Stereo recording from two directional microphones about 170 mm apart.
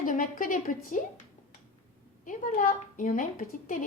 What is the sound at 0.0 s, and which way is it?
Speech, 50° left (ahead or behind).